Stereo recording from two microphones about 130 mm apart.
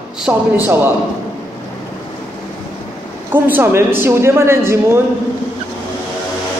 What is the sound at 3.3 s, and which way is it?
A woman's voice, 15° right (ahead or behind).